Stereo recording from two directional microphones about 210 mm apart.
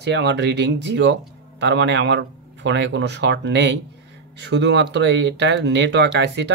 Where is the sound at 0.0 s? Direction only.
55° right (ahead or behind).